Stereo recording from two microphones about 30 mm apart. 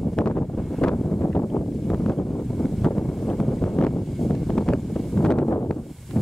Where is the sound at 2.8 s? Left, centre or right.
Left.